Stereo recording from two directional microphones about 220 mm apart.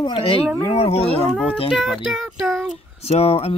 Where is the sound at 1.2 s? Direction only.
5° left (ahead or behind).